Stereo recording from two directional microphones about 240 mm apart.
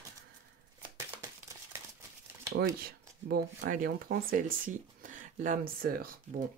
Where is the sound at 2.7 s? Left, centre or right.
Right.